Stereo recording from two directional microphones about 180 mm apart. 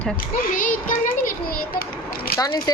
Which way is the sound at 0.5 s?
50° left (ahead or behind).